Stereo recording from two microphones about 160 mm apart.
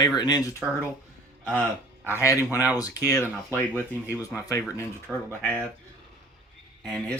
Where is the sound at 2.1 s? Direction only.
15° left (ahead or behind).